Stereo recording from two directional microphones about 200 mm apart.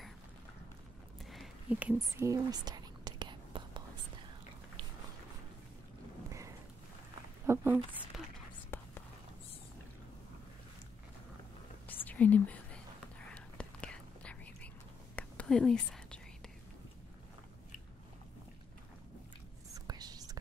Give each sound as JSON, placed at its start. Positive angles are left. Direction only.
{"t": 1.2, "sound": "whispering", "side_deg": 0}
{"t": 7.4, "sound": "a sound", "side_deg": -10}
{"t": 8.6, "sound": "whispering", "side_deg": 10}
{"t": 11.9, "sound": "whispering", "side_deg": 10}
{"t": 19.7, "sound": "whispering", "side_deg": -20}